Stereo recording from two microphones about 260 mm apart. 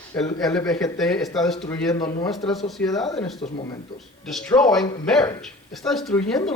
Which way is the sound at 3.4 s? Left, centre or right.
Centre.